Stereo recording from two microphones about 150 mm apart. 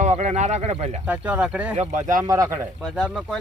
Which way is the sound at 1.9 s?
60° right (ahead or behind).